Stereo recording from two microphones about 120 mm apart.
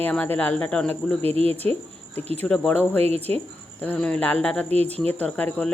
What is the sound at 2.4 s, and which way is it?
Speech, 10° left (ahead or behind).